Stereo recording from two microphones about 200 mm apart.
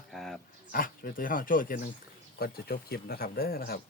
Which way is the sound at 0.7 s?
45° left (ahead or behind).